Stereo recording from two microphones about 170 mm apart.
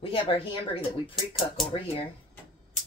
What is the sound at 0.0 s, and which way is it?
Speech, 30° left (ahead or behind).